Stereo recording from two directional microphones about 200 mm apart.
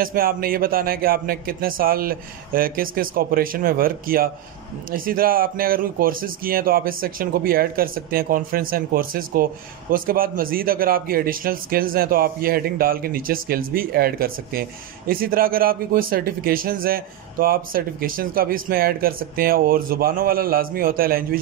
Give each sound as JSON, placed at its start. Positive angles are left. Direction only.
{"t": 0.0, "sound": "speech", "side_deg": -45}